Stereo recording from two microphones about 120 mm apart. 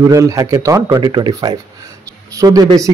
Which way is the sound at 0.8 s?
40° right (ahead or behind).